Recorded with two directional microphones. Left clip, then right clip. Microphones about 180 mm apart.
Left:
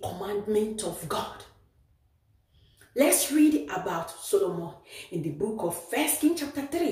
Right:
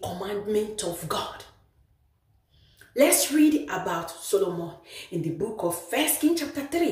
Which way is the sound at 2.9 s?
10° right (ahead or behind).